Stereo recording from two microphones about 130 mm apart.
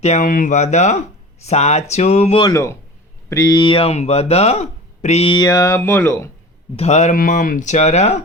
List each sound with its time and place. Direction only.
0.0 s speech: 70° left (ahead or behind); by 2.4 s 55° left (ahead or behind)
2.4 s speech: 25° left (ahead or behind); by 5.3 s 55° left (ahead or behind)
5.3 s speech: 30° left (ahead or behind)
6.7 s speech: 60° left (ahead or behind)